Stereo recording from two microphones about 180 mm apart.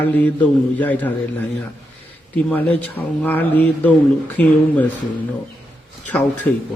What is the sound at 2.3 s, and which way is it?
A man's voice, 10° left (ahead or behind).